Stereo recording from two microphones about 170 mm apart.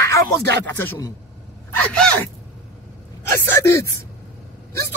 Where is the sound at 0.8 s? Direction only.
15° left (ahead or behind).